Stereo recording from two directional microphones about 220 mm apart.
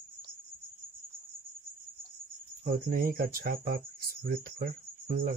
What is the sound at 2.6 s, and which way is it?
Speech, 40° right (ahead or behind).